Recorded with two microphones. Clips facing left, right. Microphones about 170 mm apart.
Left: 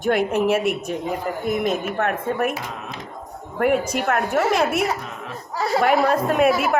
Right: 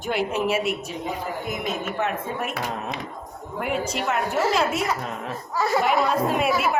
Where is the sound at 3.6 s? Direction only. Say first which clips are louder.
Left 6 dB; 55° left (ahead or behind).